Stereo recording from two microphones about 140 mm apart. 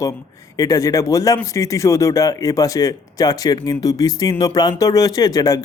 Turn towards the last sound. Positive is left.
turn(degrees=25)  # may be behind; listen again after turning